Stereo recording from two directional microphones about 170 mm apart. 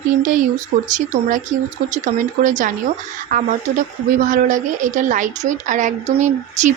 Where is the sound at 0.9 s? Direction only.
50° right (ahead or behind).